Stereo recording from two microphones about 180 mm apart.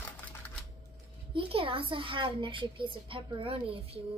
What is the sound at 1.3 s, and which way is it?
A child's voice, 30° right (ahead or behind).